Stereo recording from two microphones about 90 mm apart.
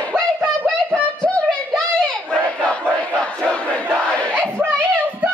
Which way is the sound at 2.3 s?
15° left (ahead or behind).